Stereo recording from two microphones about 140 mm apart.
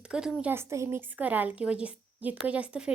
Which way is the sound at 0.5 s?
20° right (ahead or behind).